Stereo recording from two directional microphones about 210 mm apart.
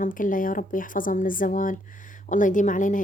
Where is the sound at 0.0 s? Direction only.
40° left (ahead or behind).